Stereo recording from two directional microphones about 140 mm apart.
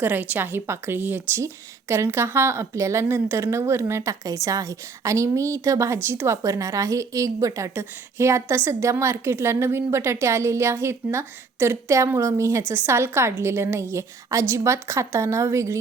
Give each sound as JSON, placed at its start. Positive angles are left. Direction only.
{"t": 0.0, "sound": "a woman's voice", "side_deg": -15}